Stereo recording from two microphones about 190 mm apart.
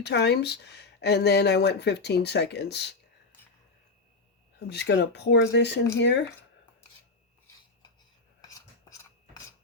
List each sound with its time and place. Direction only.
0.0 s speech: 60° left (ahead or behind)
4.7 s speech: 60° left (ahead or behind)